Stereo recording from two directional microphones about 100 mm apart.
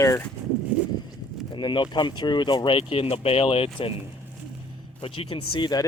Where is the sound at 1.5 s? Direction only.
55° left (ahead or behind).